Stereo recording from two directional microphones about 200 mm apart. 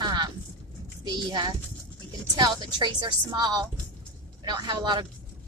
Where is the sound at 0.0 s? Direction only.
20° right (ahead or behind).